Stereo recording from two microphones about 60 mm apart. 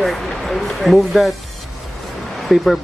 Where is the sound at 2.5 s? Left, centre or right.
Centre.